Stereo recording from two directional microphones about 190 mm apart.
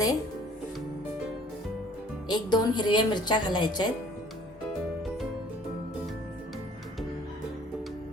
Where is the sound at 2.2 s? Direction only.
20° left (ahead or behind).